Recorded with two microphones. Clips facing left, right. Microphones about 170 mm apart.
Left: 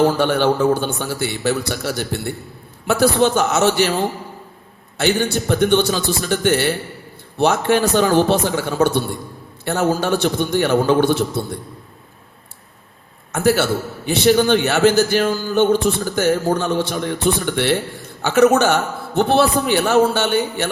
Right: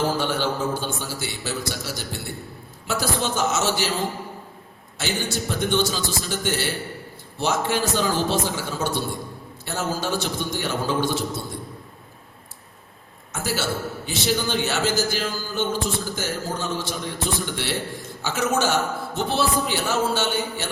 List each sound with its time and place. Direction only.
0.2 s a man's voice: 60° left (ahead or behind)
4.9 s a man's voice: 60° left (ahead or behind)
13.3 s a man's voice: 60° left (ahead or behind)